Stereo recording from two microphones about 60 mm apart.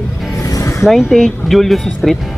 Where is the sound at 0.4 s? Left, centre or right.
Left.